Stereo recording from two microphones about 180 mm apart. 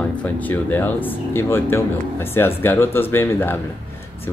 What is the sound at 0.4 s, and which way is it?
Speech, 10° left (ahead or behind).